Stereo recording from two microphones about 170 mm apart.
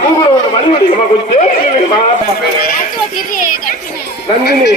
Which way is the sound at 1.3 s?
45° left (ahead or behind).